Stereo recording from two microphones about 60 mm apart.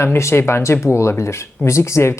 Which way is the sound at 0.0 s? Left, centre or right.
Left.